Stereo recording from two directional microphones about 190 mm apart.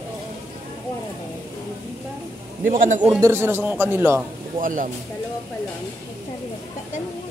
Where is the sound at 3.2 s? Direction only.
15° right (ahead or behind).